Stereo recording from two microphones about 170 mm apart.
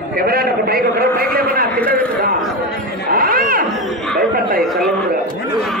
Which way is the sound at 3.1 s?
60° right (ahead or behind).